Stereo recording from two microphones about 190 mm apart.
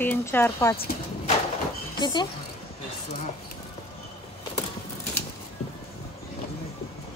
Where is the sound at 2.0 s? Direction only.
25° left (ahead or behind).